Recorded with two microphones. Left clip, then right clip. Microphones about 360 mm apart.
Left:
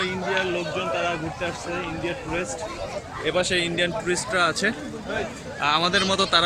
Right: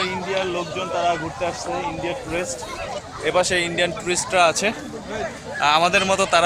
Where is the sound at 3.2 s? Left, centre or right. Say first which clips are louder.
Right 4 dB; centre.